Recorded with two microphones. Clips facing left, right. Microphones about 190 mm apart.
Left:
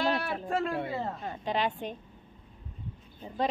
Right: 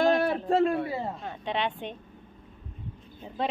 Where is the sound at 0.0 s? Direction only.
45° right (ahead or behind).